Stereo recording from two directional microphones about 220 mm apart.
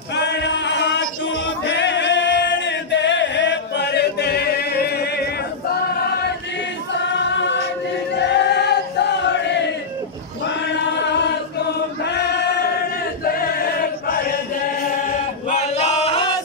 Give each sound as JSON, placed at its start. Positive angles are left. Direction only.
{"t": 0.1, "sound": "male singing", "side_deg": 50}
{"t": 1.6, "sound": "singing", "side_deg": 55}
{"t": 6.9, "sound": "choir", "side_deg": 55}
{"t": 8.3, "sound": "choir", "side_deg": 50}
{"t": 12.0, "sound": "choir", "side_deg": 50}
{"t": 15.4, "sound": "male singing", "side_deg": 30}